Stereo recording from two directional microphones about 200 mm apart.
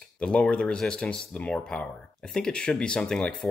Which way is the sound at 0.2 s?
5° left (ahead or behind).